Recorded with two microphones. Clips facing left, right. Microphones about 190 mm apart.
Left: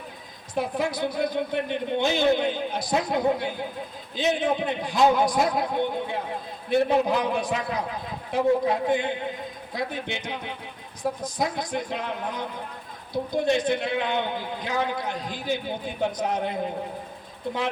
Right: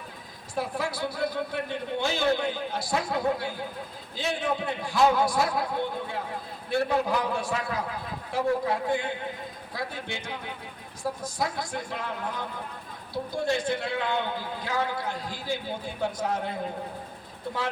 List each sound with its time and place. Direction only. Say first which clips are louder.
0.5 s a man's voice: left 4 dB; 20° left (ahead or behind)